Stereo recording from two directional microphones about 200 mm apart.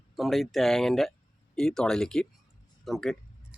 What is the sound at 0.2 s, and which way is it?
A man's voice, centre (ahead or behind).